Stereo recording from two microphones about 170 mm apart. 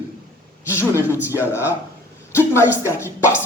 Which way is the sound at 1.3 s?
15° left (ahead or behind).